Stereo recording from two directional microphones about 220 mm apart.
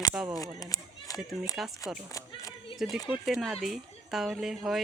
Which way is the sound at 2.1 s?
15° left (ahead or behind).